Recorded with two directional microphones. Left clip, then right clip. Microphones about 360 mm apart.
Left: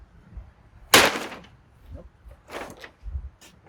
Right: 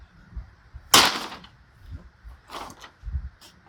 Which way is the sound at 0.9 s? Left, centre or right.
Centre.